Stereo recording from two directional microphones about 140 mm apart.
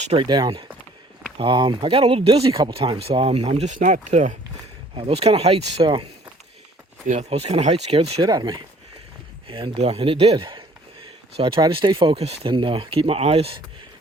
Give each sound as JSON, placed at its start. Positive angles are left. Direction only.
{"t": 0.0, "sound": "speech", "side_deg": -50}
{"t": 0.3, "sound": "speech", "side_deg": -30}
{"t": 4.9, "sound": "speech", "side_deg": -45}
{"t": 5.8, "sound": "speech", "side_deg": -35}
{"t": 7.1, "sound": "speech", "side_deg": -50}
{"t": 8.2, "sound": "speech", "side_deg": -30}